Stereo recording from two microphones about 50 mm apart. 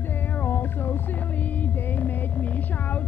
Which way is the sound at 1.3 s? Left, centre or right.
Left.